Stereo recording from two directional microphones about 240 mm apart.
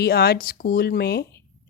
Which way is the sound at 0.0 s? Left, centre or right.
Left.